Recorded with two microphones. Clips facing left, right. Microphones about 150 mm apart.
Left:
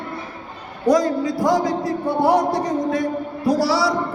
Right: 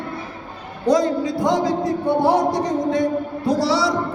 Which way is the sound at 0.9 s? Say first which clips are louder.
Even; 25° right (ahead or behind).